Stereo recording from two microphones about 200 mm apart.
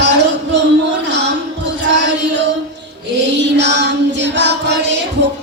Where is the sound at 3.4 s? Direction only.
60° right (ahead or behind).